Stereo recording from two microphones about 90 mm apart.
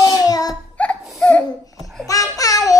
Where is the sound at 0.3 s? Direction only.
45° left (ahead or behind).